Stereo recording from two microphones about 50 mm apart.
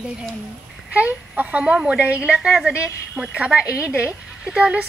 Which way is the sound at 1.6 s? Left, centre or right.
Centre.